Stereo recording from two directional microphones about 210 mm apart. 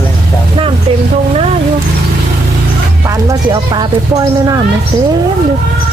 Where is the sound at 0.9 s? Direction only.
25° right (ahead or behind).